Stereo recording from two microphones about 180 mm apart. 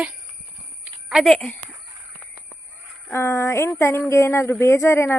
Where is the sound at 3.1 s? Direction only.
15° left (ahead or behind).